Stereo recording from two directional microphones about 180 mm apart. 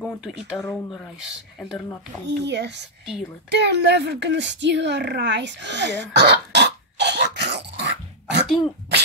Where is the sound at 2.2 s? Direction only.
75° right (ahead or behind).